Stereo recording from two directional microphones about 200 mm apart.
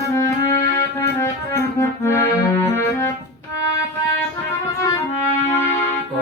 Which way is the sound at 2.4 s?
10° left (ahead or behind).